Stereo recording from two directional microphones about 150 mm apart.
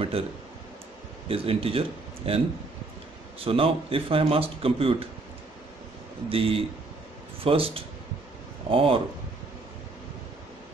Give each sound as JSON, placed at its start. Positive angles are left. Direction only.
{"t": 1.3, "sound": "speech", "side_deg": -40}
{"t": 6.2, "sound": "speech", "side_deg": -40}